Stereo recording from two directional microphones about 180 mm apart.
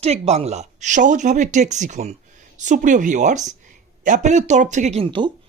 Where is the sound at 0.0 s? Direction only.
35° right (ahead or behind).